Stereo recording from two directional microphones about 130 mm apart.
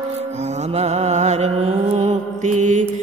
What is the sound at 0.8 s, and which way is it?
Music, 60° right (ahead or behind).